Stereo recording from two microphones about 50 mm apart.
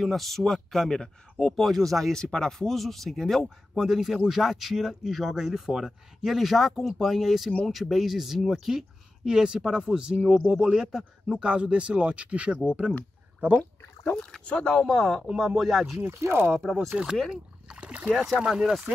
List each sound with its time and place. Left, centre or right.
0.0 s speech: centre
3.7 s speech: centre
14.4 s speech: centre
15.3 s speech: centre
16.2 s speech: right
16.5 s speech: centre
17.3 s speech: centre
18.4 s speech: centre